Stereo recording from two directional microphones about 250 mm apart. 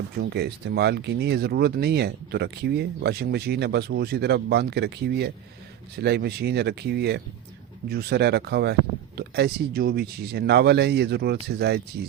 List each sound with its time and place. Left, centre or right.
0.3 s speech: right